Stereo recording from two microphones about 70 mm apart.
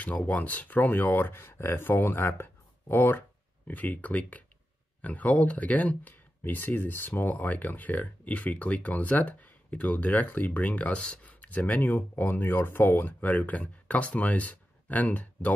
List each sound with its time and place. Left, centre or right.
0.0 s speech: left